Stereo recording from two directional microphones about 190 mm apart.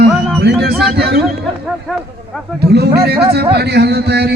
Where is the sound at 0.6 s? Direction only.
55° right (ahead or behind).